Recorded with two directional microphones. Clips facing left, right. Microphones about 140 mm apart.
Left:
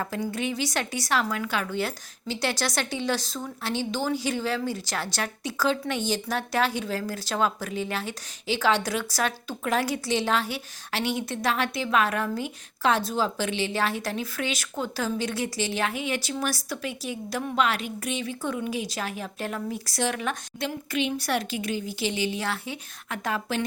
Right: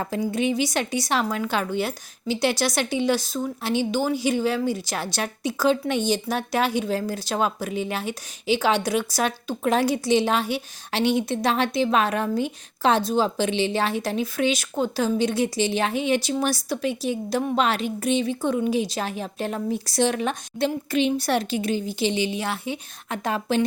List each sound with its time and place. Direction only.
0.0 s speech: 20° right (ahead or behind)
1.8 s speech: 15° right (ahead or behind)